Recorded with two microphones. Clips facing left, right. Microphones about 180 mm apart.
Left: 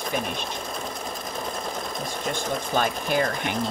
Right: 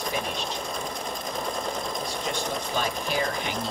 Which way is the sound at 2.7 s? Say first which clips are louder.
Left 5 dB; 50° left (ahead or behind).